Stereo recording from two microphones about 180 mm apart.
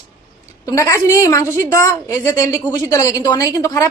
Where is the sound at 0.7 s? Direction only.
15° left (ahead or behind).